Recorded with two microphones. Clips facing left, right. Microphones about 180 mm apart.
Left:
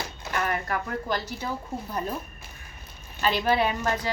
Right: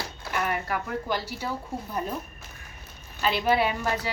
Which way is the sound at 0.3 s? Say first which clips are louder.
Even; 10° right (ahead or behind).